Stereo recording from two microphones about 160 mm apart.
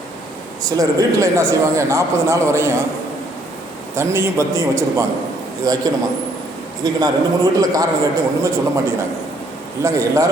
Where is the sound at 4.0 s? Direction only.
15° right (ahead or behind).